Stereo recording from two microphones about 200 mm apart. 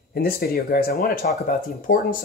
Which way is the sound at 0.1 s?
50° left (ahead or behind).